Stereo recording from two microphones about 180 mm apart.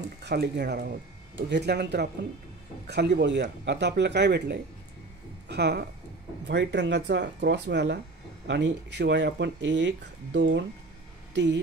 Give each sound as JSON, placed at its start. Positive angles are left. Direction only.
{"t": 0.2, "sound": "speech", "side_deg": -65}
{"t": 6.4, "sound": "speech", "side_deg": -75}